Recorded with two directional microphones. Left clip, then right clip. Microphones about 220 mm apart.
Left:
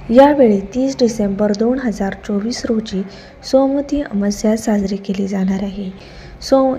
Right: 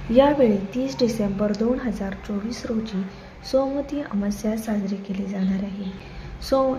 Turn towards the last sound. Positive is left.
turn(degrees=20)  # may be behind; listen again after turning